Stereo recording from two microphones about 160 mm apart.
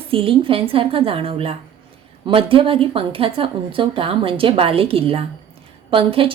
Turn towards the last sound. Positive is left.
turn(degrees=-35)  # may be behind; listen again after turning